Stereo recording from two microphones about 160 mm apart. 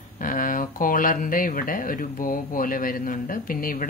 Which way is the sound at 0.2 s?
60° left (ahead or behind).